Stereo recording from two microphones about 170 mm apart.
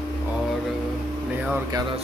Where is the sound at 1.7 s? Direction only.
20° right (ahead or behind).